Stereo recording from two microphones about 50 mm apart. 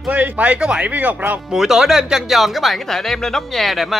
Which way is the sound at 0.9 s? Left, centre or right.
Right.